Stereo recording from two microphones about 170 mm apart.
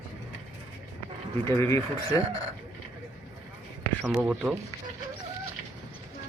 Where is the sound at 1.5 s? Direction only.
15° left (ahead or behind).